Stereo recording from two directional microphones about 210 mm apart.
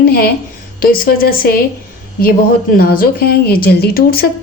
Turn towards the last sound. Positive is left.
turn(degrees=45)  # may be behind; listen again after turning